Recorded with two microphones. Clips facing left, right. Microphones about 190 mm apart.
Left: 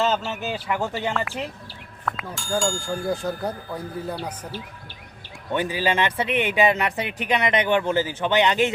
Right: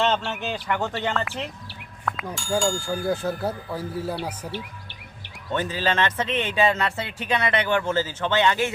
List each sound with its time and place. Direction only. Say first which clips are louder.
0.0 s speech: even; 5° left (ahead or behind)
5.5 s speech: left 2 dB; 15° left (ahead or behind)